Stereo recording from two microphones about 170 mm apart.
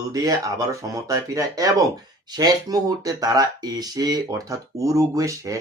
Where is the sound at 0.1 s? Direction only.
20° right (ahead or behind).